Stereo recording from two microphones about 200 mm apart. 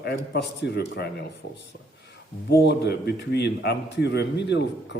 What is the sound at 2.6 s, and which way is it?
A man's voice, 55° left (ahead or behind).